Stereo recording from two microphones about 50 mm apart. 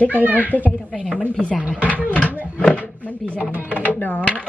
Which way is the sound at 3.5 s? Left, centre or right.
Left.